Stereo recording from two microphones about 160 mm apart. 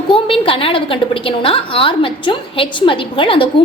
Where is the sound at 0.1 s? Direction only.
35° left (ahead or behind).